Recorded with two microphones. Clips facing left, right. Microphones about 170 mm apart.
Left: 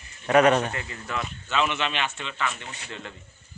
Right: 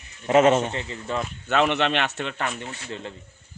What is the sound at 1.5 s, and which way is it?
A man's voice, 60° right (ahead or behind).